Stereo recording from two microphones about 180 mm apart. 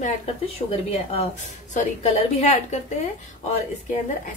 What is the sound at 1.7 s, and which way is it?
A woman's voice, 40° left (ahead or behind).